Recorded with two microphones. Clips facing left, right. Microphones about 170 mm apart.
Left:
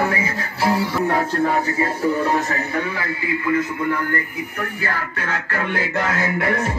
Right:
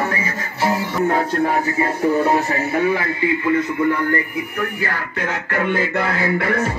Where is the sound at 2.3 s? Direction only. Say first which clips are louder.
Right 3 dB; 15° right (ahead or behind).